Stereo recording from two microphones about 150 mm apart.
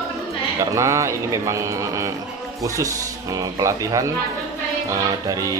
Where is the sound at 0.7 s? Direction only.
20° right (ahead or behind).